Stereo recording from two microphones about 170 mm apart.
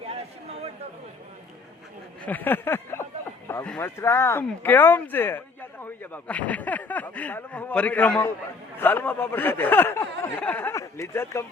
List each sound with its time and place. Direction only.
0.1 s chatter: 35° right (ahead or behind)
2.2 s speech: 10° left (ahead or behind)